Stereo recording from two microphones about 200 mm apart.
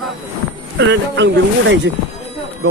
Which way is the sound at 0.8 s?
60° right (ahead or behind).